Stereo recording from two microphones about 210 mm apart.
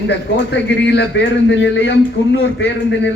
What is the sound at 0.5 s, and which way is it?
A man's voice, 55° left (ahead or behind).